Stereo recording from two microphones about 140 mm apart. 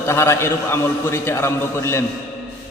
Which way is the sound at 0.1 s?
20° left (ahead or behind).